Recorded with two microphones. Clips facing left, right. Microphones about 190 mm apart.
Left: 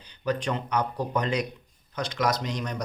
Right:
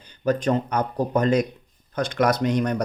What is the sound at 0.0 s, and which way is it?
Speech, 45° right (ahead or behind).